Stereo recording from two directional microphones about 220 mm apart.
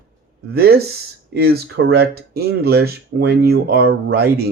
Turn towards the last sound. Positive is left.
turn(degrees=-45)  # may be behind; listen again after turning